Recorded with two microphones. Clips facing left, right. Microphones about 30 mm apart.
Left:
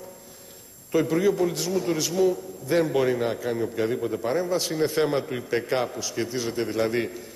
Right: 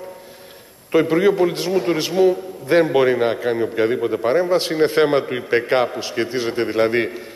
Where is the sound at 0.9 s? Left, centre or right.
Right.